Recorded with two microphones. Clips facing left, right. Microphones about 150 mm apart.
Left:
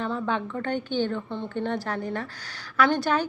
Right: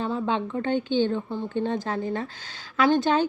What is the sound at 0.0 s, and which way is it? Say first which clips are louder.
A woman's voice: right 2 dB; 20° right (ahead or behind).